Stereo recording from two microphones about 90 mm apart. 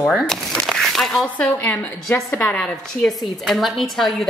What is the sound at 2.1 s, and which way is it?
Speech, 30° left (ahead or behind).